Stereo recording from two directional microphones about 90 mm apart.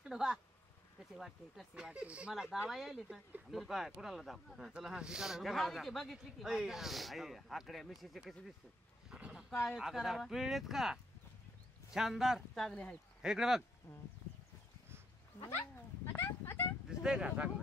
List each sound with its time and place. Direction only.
0.0 s speech: 5° right (ahead or behind)
9.1 s a sound: 10° right (ahead or behind)
9.7 s speech: 5° right (ahead or behind)
16.2 s speech: 25° left (ahead or behind)
16.9 s speech: 10° right (ahead or behind)